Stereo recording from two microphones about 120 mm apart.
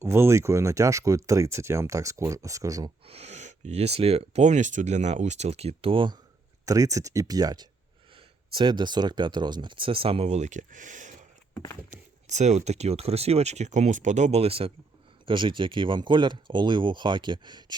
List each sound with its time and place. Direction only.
0.0 s speech: 20° right (ahead or behind)
3.1 s speech: 65° right (ahead or behind); by 6.1 s 45° right (ahead or behind)
6.7 s speech: 30° right (ahead or behind); by 11.3 s 90° right
11.9 s speech: 75° right (ahead or behind); by 14.7 s 55° right (ahead or behind)
15.3 s speech: 45° right (ahead or behind)